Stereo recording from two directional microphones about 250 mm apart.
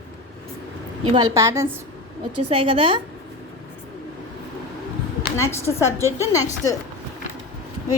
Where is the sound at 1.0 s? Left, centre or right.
Centre.